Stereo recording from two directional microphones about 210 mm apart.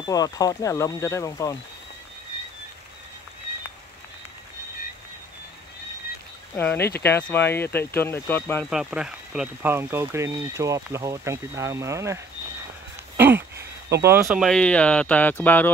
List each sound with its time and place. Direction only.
0.0 s speech: 15° left (ahead or behind)
6.5 s speech: 10° left (ahead or behind)
8.6 s speech: 5° right (ahead or behind)
13.2 s a sound: 10° right (ahead or behind)
14.0 s speech: 10° right (ahead or behind)
14.4 s speech: 5° left (ahead or behind)